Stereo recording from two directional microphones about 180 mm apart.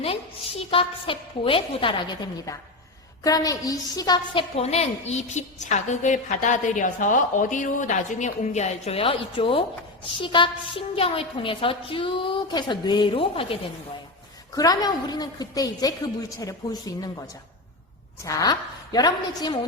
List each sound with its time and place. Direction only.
0.0 s a woman's voice: 35° left (ahead or behind)
4.5 s a woman's voice: 35° left (ahead or behind)
14.5 s a woman's voice: 20° left (ahead or behind)
18.3 s a woman's voice: 20° left (ahead or behind)